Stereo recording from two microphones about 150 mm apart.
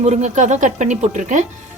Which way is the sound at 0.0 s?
50° right (ahead or behind).